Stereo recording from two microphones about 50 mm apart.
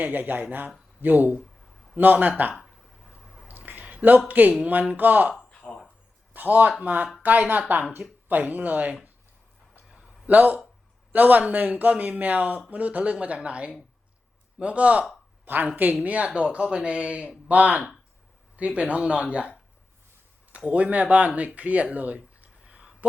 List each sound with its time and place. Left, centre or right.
0.0 s speech: right
3.2 s a sound: centre
3.7 s a sound: right
4.3 s speech: right
5.5 s a sound: left
6.3 s speech: right
10.2 s speech: right
15.4 s speech: right
20.7 s speech: right